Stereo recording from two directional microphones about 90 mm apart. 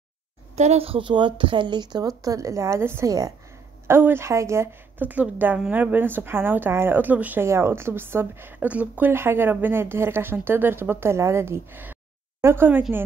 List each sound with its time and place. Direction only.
0.7 s speech: 90° right; by 3.1 s 30° right (ahead or behind)
3.1 s a woman's voice: 40° right (ahead or behind)
3.8 s a woman's voice: 25° right (ahead or behind)